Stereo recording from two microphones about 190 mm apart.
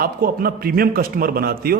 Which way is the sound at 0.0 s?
50° right (ahead or behind).